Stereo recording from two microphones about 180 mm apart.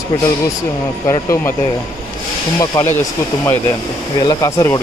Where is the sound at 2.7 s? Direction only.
15° left (ahead or behind).